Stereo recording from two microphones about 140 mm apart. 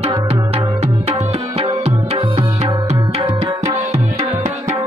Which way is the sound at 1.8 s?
45° right (ahead or behind).